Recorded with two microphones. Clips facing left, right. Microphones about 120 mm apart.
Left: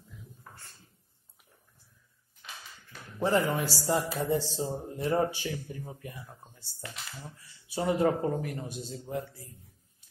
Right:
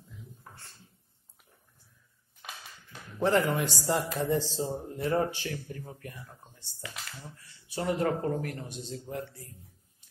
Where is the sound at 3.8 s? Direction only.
10° left (ahead or behind).